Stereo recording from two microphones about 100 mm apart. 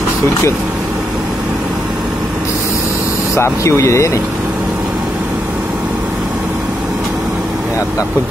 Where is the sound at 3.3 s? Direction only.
30° left (ahead or behind).